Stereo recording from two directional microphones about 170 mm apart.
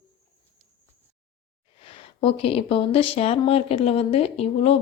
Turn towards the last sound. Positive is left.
turn(degrees=35)  # may be behind; listen again after turning